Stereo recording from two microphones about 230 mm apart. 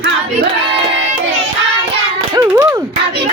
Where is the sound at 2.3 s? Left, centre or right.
Centre.